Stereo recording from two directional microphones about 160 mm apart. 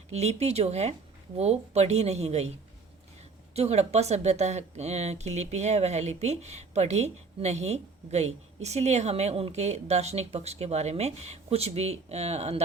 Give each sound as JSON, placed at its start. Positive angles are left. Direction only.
{"t": 0.1, "sound": "speech", "side_deg": -40}
{"t": 3.5, "sound": "speech", "side_deg": -40}